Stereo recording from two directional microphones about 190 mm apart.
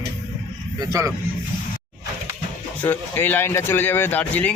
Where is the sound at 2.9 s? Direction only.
10° left (ahead or behind).